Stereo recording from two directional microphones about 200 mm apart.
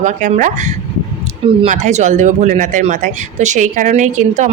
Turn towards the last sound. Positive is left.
turn(degrees=-35)  # may be behind; listen again after turning